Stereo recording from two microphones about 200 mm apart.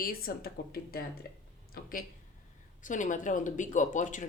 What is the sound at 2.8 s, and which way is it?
Speech, 40° left (ahead or behind).